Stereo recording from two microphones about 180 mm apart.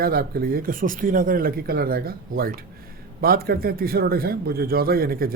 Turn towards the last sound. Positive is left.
turn(degrees=-55)  # may be behind; listen again after turning